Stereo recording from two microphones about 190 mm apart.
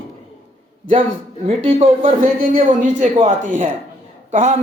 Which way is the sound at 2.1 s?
45° right (ahead or behind).